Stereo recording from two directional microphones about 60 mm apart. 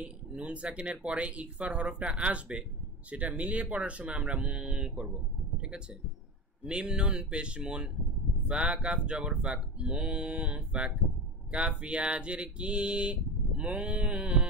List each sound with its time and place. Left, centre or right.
0.0 s speech: centre
6.6 s speech: centre